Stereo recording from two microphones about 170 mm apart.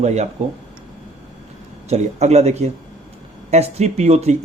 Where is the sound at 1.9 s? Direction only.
40° right (ahead or behind).